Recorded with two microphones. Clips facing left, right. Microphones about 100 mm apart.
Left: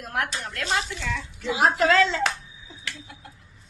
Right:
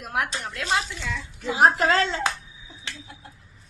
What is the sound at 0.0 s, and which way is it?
Speech, 20° right (ahead or behind).